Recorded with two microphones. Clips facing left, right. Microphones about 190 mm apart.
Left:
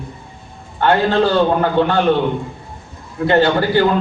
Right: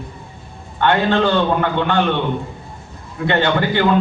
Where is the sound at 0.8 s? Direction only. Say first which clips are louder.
Left 2 dB; 35° left (ahead or behind).